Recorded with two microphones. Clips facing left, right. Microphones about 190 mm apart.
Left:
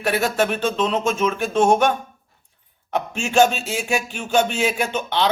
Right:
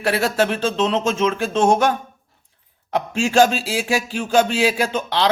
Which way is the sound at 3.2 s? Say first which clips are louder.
Right 1 dB; 35° right (ahead or behind).